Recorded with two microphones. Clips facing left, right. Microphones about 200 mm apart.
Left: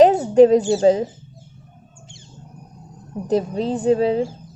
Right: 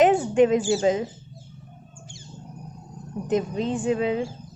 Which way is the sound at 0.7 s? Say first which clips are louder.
Left 6 dB; 35° left (ahead or behind).